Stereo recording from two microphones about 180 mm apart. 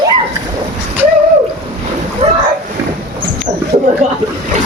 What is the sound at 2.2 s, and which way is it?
Boat, 30° right (ahead or behind).